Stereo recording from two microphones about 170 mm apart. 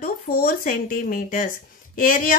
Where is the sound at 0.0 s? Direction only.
60° left (ahead or behind).